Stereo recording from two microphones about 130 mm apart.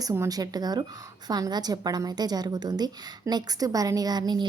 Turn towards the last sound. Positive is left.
turn(degrees=-35)  # may be behind; listen again after turning